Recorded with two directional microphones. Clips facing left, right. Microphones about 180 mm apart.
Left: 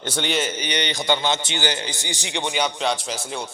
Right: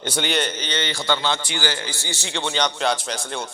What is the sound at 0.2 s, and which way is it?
A man's voice, centre (ahead or behind).